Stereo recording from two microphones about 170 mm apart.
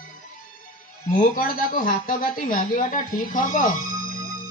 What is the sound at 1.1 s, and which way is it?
Speech, 55° left (ahead or behind).